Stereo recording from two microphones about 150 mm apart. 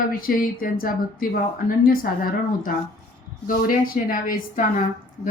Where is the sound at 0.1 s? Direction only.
70° left (ahead or behind).